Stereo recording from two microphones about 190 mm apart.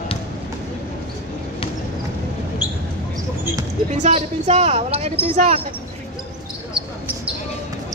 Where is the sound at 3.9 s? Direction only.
35° right (ahead or behind).